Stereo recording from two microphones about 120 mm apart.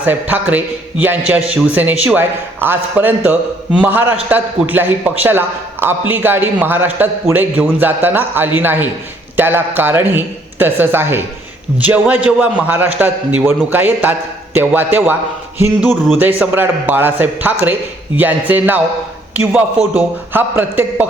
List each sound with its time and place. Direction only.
0.0 s a man's voice: 15° right (ahead or behind)
15.5 s a sound: 20° right (ahead or behind)
16.1 s a man's voice: 15° right (ahead or behind)